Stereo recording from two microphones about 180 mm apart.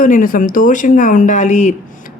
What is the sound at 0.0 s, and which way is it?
Speech, 50° left (ahead or behind).